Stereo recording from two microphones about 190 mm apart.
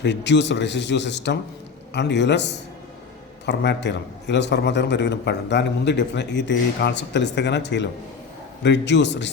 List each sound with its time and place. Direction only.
0.0 s a man's voice: 65° left (ahead or behind)